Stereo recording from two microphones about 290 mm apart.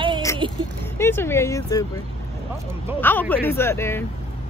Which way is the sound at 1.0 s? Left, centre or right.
Centre.